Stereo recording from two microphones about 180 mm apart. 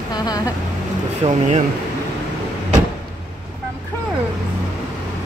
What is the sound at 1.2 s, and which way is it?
Speech, 30° right (ahead or behind).